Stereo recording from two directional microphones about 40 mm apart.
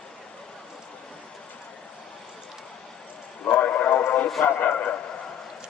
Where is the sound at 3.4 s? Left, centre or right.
Left.